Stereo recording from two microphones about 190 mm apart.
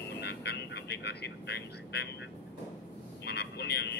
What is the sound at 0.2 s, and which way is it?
Vehicle, 60° left (ahead or behind).